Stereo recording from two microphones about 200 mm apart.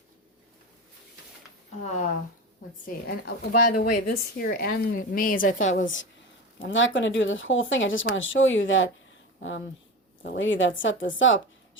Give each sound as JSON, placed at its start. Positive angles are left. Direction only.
{"t": 2.8, "sound": "a woman's voice", "side_deg": 45}
{"t": 5.7, "sound": "speech", "side_deg": 70}